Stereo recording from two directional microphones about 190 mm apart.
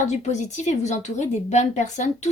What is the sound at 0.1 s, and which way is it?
A woman's voice, 40° left (ahead or behind).